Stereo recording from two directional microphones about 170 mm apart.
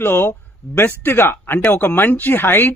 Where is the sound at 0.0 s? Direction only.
15° left (ahead or behind).